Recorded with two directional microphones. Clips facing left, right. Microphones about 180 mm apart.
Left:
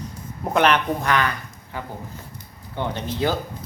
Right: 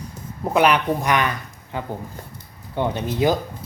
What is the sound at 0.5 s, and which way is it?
Speech, 10° right (ahead or behind).